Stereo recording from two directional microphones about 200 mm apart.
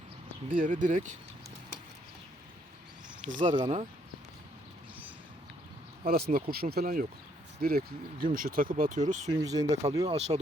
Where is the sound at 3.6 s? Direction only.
30° right (ahead or behind).